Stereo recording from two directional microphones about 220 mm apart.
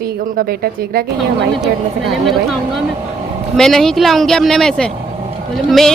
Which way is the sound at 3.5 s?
Centre (ahead or behind).